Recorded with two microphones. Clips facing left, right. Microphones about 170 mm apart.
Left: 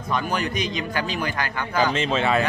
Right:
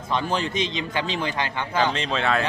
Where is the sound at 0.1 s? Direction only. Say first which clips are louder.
Even; 25° right (ahead or behind).